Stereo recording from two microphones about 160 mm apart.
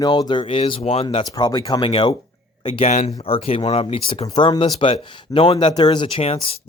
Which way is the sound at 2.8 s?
45° left (ahead or behind).